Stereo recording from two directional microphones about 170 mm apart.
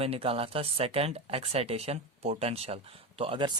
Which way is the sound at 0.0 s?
35° right (ahead or behind).